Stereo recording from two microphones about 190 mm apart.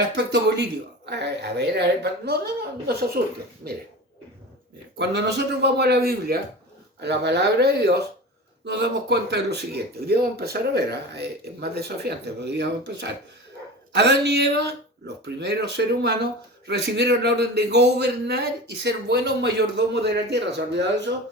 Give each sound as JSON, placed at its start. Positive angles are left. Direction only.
{"t": 0.2, "sound": "speech", "side_deg": -65}
{"t": 4.9, "sound": "speech", "side_deg": -60}